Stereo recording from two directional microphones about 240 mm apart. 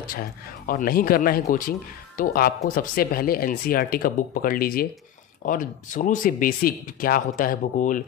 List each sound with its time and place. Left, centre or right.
0.0 s speech: left